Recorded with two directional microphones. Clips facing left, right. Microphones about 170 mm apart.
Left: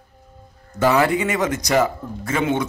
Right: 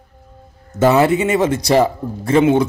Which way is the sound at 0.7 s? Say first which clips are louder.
Right 4 dB; 20° right (ahead or behind).